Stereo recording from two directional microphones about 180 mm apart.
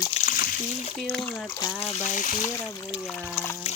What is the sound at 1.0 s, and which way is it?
Speech, 5° left (ahead or behind).